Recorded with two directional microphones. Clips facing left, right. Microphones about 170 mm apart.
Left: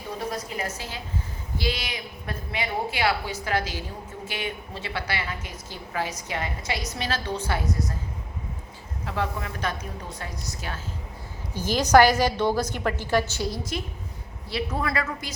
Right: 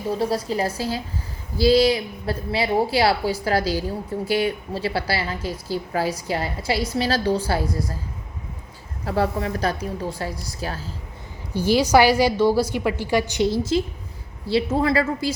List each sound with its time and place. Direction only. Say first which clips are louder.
0.2 s a woman's voice: right 6 dB; 30° right (ahead or behind)
9.0 s a woman's voice: right 7 dB; 35° right (ahead or behind)
11.5 s a woman's voice: right 2 dB; 10° right (ahead or behind)
13.5 s speech: right 10 dB; 25° right (ahead or behind)